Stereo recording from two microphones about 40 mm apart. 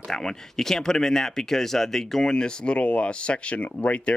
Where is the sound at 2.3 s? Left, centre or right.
Left.